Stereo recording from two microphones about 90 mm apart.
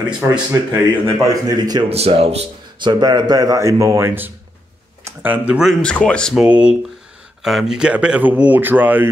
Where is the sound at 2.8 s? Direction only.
50° right (ahead or behind); by 5.6 s 15° right (ahead or behind).